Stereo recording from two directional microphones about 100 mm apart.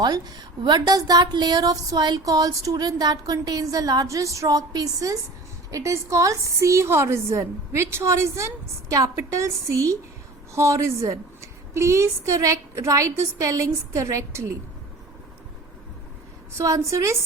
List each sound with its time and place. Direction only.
0.0 s a woman's voice: 40° right (ahead or behind)
16.6 s a woman's voice: 30° right (ahead or behind)